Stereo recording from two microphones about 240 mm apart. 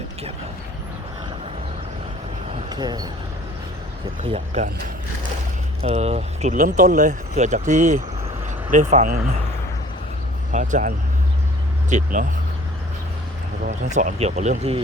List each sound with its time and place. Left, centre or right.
2.6 s speech: centre
4.2 s speech: right
5.8 s speech: right
10.5 s speech: right
13.7 s speech: right